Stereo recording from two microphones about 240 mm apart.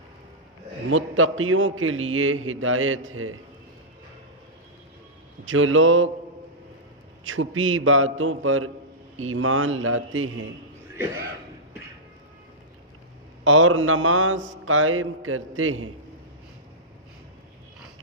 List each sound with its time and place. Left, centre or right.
0.9 s mantra: right
5.5 s mantra: right
7.3 s mantra: right
10.9 s speech: centre
13.4 s mantra: right